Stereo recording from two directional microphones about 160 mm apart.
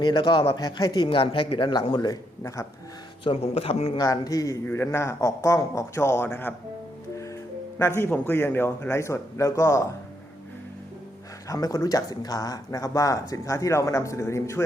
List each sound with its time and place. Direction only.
0.0 s speech: 30° left (ahead or behind)
3.2 s speech: 40° left (ahead or behind)
3.9 s speech: 25° left (ahead or behind)
7.8 s a man's voice: 15° left (ahead or behind)
11.4 s speech: 20° left (ahead or behind)